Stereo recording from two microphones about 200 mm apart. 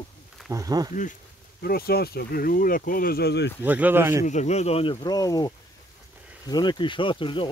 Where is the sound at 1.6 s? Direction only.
50° left (ahead or behind).